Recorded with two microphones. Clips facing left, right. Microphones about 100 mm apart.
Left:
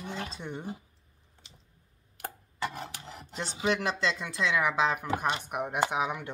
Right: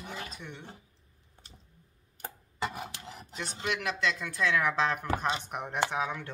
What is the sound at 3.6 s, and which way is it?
Speech, 30° left (ahead or behind).